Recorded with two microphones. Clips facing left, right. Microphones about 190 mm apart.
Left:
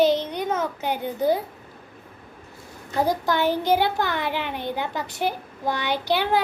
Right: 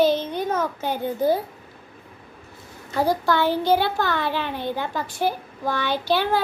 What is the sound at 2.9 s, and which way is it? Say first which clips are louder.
A child's voice: right 1 dB; 20° left (ahead or behind).